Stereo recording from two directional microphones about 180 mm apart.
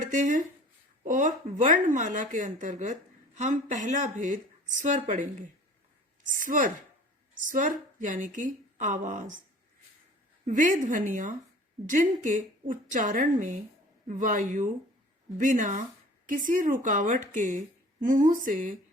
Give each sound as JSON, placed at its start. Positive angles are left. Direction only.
{"t": 0.0, "sound": "speech", "side_deg": -45}
{"t": 10.4, "sound": "speech", "side_deg": -45}